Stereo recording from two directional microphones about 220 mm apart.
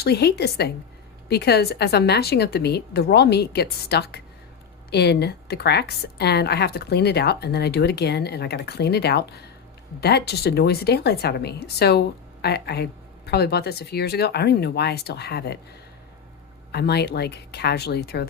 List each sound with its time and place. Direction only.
0.0 s a woman's voice: 45° left (ahead or behind)
16.7 s a woman's voice: 50° left (ahead or behind)